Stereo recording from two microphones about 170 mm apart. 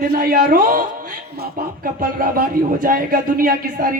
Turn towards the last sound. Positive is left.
turn(degrees=-55)  # may be behind; listen again after turning